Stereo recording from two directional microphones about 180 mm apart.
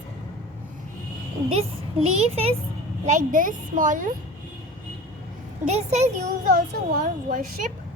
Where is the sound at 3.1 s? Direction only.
45° right (ahead or behind).